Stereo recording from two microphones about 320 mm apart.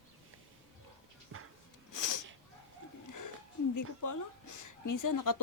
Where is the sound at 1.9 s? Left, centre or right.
Left.